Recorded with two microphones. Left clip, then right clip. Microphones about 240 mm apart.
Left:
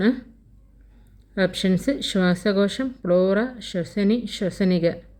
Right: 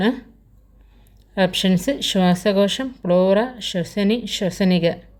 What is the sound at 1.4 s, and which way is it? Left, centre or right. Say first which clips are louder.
Speech: right 4 dB; right.